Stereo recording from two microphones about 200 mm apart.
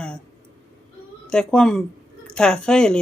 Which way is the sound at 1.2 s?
5° left (ahead or behind).